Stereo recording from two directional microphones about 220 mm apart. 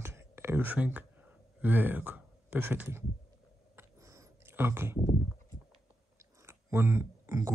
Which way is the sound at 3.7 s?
15° right (ahead or behind).